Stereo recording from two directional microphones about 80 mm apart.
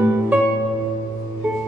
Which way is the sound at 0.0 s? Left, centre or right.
Right.